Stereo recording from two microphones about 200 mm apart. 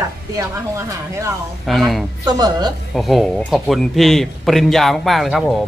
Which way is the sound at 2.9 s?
Centre (ahead or behind).